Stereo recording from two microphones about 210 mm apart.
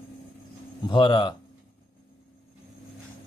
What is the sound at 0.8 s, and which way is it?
Speech, 20° left (ahead or behind).